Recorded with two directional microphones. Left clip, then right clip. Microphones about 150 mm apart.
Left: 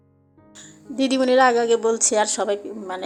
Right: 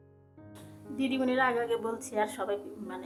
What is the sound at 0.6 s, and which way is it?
Speech, 35° left (ahead or behind).